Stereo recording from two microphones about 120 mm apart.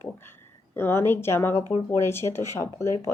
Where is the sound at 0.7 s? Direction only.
20° left (ahead or behind).